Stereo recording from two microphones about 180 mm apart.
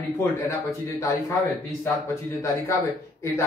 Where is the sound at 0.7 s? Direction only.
15° left (ahead or behind).